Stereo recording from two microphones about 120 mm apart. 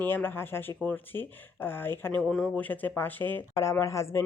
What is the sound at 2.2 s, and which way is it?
Speech, 5° left (ahead or behind).